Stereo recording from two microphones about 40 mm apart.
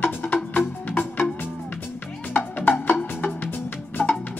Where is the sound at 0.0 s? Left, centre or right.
Left.